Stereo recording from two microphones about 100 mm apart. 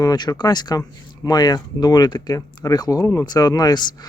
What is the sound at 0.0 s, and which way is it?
Speech, 40° left (ahead or behind).